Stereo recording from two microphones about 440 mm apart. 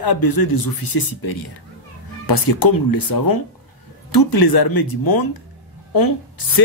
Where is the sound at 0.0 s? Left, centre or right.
Left.